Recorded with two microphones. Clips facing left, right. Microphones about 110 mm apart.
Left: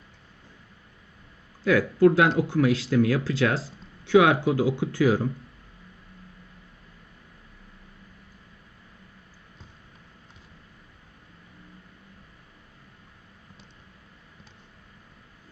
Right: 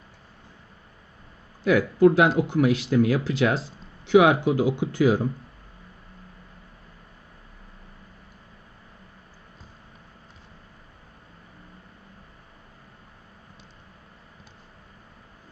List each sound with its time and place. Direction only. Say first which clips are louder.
1.6 s speech: right 1 dB; 15° right (ahead or behind)